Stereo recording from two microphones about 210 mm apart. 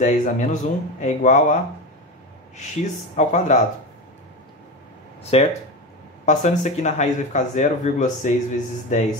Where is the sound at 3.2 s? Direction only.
35° left (ahead or behind).